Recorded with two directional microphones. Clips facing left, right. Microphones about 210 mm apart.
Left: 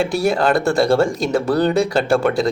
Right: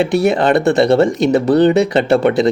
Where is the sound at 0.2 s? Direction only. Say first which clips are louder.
Right 3 dB; 20° right (ahead or behind).